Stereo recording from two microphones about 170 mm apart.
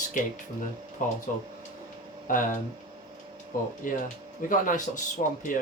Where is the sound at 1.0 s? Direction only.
50° left (ahead or behind).